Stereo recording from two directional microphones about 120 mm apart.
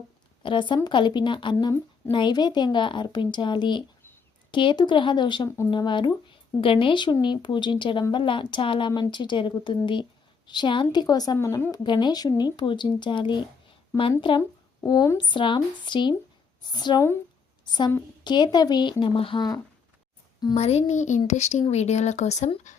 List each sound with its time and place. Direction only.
0.4 s a woman's voice: 45° left (ahead or behind); by 11.6 s 25° left (ahead or behind)
11.7 s a woman's voice: 40° left (ahead or behind)
20.6 s speech: 60° left (ahead or behind)
22.7 s a sound: 90° left